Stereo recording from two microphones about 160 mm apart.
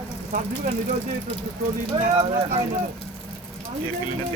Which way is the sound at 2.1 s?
30° right (ahead or behind).